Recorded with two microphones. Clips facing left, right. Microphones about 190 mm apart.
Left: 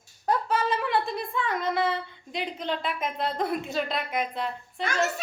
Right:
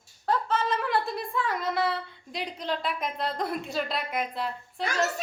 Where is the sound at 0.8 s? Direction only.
Centre (ahead or behind).